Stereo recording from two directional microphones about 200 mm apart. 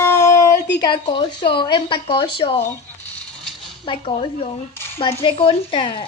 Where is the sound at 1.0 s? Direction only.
25° left (ahead or behind).